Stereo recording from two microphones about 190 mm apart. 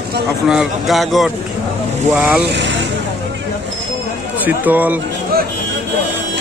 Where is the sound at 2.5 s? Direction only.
70° right (ahead or behind).